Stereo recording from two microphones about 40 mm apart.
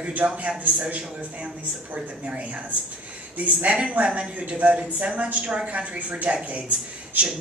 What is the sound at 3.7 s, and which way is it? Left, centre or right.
A woman's voice, right.